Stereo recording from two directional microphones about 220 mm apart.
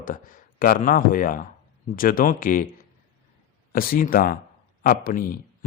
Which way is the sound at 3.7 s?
40° left (ahead or behind).